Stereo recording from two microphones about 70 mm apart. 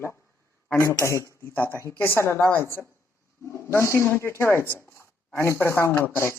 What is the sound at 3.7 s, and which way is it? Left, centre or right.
Speech, left.